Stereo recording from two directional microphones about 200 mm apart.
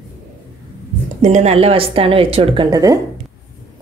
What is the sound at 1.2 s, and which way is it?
Speech, 35° right (ahead or behind).